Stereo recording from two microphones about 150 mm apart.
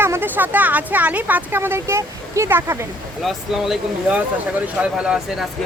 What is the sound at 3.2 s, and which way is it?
A woman's voice, centre (ahead or behind).